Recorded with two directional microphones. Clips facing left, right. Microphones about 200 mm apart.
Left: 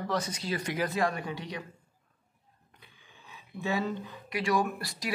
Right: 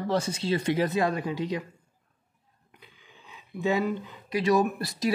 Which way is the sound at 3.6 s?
15° right (ahead or behind).